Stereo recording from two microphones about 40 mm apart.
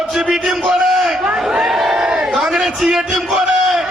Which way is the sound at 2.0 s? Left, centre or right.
Right.